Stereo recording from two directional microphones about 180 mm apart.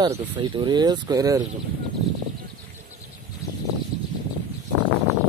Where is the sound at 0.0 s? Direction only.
25° right (ahead or behind).